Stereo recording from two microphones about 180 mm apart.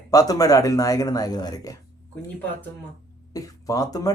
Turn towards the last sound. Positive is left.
turn(degrees=20)  # may be behind; listen again after turning